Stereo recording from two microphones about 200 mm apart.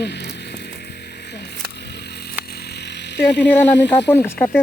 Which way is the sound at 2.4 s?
50° left (ahead or behind).